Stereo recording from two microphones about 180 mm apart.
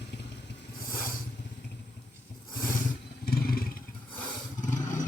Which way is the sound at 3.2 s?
55° left (ahead or behind).